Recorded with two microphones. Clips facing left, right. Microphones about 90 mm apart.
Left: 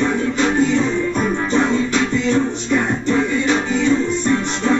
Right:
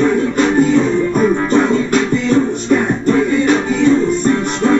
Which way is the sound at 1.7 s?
45° right (ahead or behind).